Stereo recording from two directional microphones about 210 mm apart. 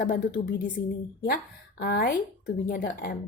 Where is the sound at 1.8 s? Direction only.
45° left (ahead or behind).